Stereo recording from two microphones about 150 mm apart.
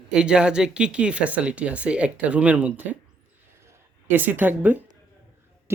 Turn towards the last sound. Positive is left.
turn(degrees=-10)  # may be behind; listen again after turning